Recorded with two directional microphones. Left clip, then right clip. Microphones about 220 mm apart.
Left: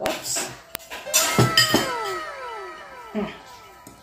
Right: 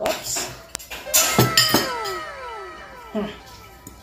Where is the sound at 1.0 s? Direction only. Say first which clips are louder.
Right 1 dB; centre (ahead or behind).